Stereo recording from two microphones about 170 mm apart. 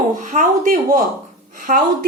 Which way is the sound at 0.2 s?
50° right (ahead or behind).